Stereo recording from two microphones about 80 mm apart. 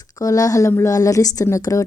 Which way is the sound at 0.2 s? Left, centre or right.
Left.